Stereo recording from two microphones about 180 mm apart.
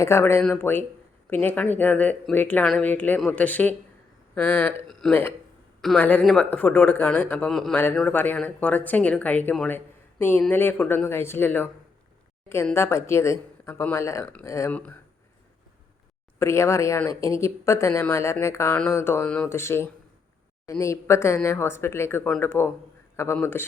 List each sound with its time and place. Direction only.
0.0 s speech: 15° left (ahead or behind)
12.7 s speech: 15° left (ahead or behind)
16.4 s speech: 15° left (ahead or behind)